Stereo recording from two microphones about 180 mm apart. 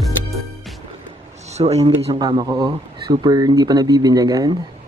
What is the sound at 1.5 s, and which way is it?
Speech, 35° right (ahead or behind).